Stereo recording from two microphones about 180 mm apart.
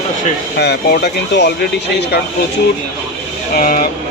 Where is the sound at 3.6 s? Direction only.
50° left (ahead or behind).